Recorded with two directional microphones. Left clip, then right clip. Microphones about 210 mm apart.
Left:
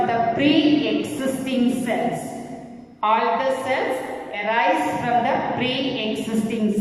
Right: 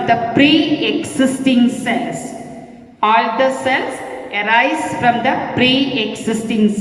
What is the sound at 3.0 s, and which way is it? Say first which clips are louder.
A woman's voice: right 6 dB; 45° right (ahead or behind).